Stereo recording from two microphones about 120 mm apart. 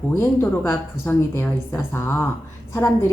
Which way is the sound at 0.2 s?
25° left (ahead or behind).